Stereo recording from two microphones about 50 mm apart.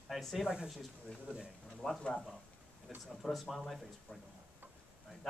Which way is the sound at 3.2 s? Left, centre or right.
Centre.